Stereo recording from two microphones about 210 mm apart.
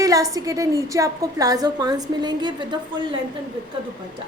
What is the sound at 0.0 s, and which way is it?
A woman's voice, 15° right (ahead or behind).